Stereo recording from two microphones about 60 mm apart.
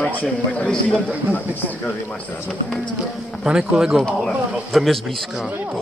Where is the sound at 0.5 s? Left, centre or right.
Left.